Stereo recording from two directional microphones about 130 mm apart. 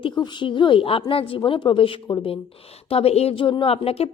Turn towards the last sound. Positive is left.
turn(degrees=50)  # may be behind; listen again after turning